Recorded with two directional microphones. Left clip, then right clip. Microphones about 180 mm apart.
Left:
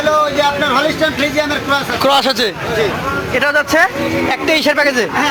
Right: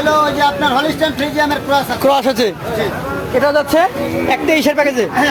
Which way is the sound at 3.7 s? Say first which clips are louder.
Left 1 dB; 15° right (ahead or behind).